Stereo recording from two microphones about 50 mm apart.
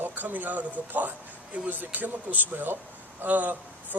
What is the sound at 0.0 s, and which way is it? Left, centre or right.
Speech, right.